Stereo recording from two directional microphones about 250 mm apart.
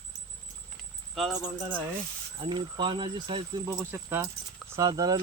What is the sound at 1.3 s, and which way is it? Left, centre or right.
Speech, centre.